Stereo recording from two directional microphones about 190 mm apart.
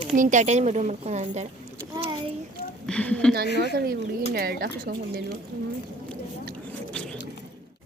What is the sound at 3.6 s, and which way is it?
Speech, 55° right (ahead or behind).